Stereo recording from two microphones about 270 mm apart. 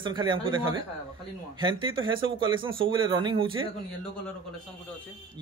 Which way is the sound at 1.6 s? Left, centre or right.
Centre.